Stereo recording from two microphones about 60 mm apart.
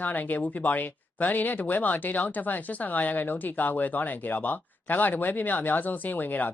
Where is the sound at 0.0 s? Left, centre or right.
Left.